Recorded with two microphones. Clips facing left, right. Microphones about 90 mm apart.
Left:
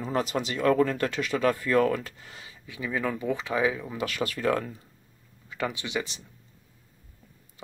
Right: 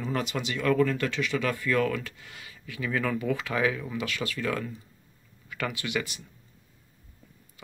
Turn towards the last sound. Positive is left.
turn(degrees=25)  # may be behind; listen again after turning